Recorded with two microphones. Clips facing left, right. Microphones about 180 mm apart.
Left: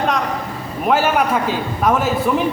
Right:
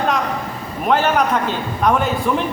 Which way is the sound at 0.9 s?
5° left (ahead or behind).